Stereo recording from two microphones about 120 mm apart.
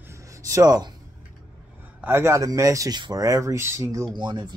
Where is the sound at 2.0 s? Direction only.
20° right (ahead or behind).